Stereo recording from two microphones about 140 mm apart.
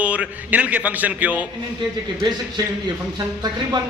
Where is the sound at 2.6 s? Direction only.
30° right (ahead or behind).